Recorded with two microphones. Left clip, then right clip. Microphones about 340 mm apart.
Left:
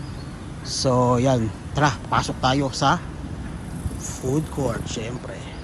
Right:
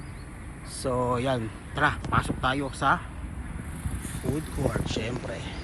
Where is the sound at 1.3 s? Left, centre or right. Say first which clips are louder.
Left 6 dB; centre.